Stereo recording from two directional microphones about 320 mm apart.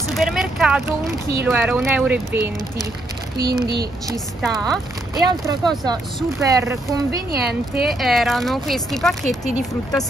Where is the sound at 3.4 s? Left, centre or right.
Right.